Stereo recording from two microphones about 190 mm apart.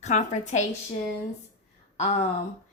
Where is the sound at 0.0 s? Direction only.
40° left (ahead or behind).